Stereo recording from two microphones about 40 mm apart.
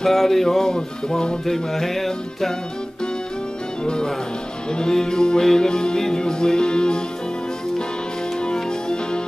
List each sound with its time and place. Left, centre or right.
0.0 s music: centre
1.4 s music: centre
3.8 s music: left
8.5 s music: left